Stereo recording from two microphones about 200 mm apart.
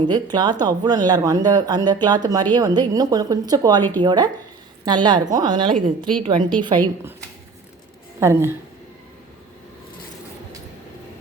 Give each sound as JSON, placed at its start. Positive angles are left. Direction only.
{"t": 0.0, "sound": "speech", "side_deg": -20}
{"t": 8.2, "sound": "speech", "side_deg": -15}